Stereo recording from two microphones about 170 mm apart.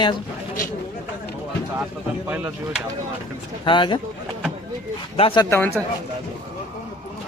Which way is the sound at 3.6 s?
30° left (ahead or behind).